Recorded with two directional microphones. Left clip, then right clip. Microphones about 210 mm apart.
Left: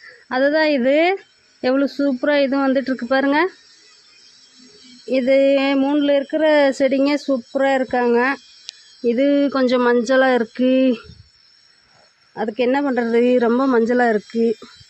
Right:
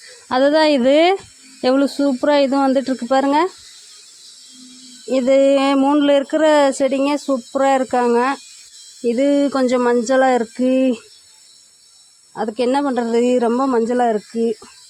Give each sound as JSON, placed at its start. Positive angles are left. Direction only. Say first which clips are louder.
{"t": 0.3, "sound": "speech", "louder": "right 3 dB", "side_deg": -15}
{"t": 5.0, "sound": "speech", "louder": "right 1 dB", "side_deg": -10}
{"t": 12.3, "sound": "speech", "louder": "right 1 dB", "side_deg": -5}